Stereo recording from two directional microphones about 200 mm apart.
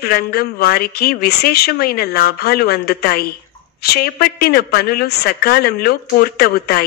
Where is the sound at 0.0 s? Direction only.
50° left (ahead or behind).